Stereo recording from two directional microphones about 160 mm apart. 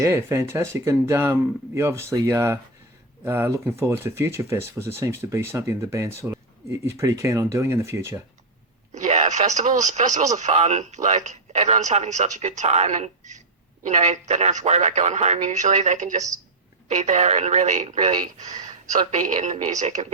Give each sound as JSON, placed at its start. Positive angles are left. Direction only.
{"t": 0.0, "sound": "speech", "side_deg": -15}
{"t": 9.0, "sound": "speech", "side_deg": -45}